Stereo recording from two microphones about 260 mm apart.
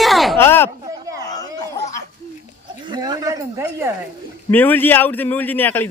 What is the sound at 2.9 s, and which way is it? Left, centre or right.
Speech, centre.